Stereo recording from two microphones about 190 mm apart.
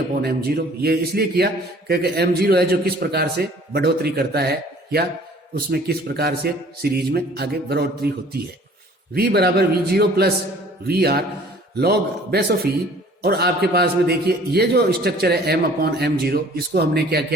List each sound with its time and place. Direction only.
0.2 s a man's voice: 55° right (ahead or behind)